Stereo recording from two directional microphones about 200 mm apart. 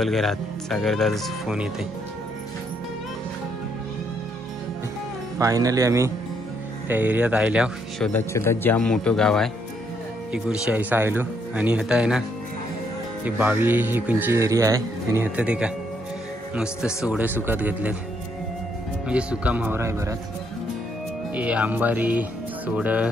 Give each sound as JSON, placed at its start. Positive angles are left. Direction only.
{"t": 0.0, "sound": "speech", "side_deg": 0}
{"t": 5.4, "sound": "speech", "side_deg": -15}
{"t": 8.1, "sound": "speech", "side_deg": 10}
{"t": 13.2, "sound": "speech", "side_deg": -10}
{"t": 19.0, "sound": "speech", "side_deg": -5}
{"t": 21.4, "sound": "speech", "side_deg": -5}